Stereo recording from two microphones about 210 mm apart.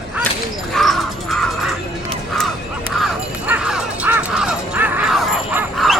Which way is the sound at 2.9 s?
5° right (ahead or behind).